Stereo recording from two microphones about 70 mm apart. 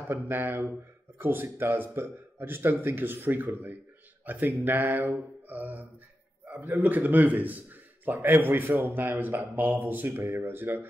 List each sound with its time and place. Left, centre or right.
0.1 s a man's voice: right